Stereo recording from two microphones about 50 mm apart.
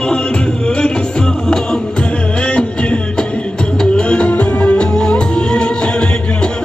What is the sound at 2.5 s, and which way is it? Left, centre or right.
Music, left.